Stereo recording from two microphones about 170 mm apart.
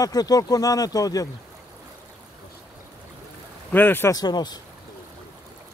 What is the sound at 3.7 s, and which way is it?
Speech, 10° left (ahead or behind).